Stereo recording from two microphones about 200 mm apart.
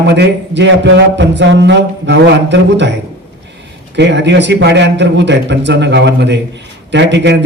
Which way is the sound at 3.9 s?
60° right (ahead or behind).